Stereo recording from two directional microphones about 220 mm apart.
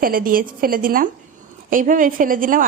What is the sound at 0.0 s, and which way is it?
A woman's voice, 40° right (ahead or behind).